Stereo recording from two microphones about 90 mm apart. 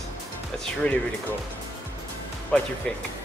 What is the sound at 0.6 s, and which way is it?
Speech, 15° left (ahead or behind).